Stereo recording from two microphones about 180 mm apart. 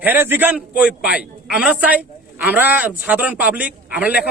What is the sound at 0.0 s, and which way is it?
A man's voice, 10° right (ahead or behind).